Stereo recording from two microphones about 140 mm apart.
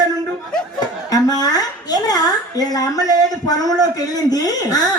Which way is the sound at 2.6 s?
25° left (ahead or behind).